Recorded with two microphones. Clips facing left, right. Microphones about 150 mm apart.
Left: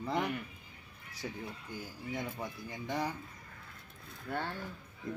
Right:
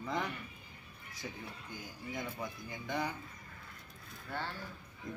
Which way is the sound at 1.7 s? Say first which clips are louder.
Left 2 dB; 30° left (ahead or behind).